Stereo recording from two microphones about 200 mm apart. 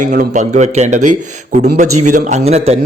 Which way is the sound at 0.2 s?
35° right (ahead or behind).